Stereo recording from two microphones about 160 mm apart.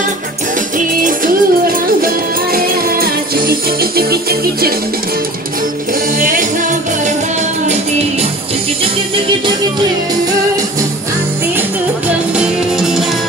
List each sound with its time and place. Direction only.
0.7 s music: 55° right (ahead or behind)
6.1 s music: 60° right (ahead or behind)
12.4 s music: 5° right (ahead or behind)